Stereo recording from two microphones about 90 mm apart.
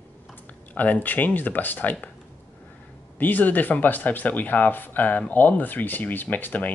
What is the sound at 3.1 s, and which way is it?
Speech, 20° left (ahead or behind).